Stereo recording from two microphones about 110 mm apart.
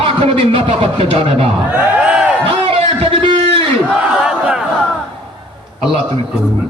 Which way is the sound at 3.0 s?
55° right (ahead or behind).